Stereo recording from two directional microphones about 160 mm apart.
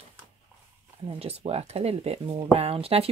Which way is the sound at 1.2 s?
40° right (ahead or behind).